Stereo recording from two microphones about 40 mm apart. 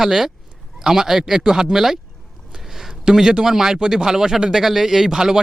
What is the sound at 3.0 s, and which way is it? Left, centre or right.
Speech, centre.